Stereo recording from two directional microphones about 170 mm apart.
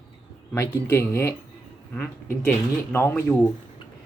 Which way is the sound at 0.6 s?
15° left (ahead or behind).